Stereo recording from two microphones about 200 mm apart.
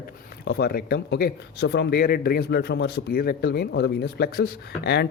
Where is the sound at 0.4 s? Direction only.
55° left (ahead or behind).